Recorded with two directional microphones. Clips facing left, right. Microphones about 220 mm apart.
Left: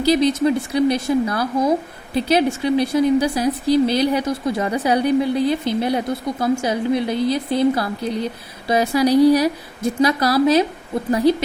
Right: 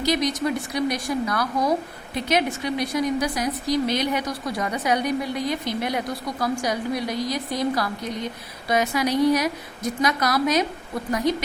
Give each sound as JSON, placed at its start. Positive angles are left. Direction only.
{"t": 0.0, "sound": "speech", "side_deg": 30}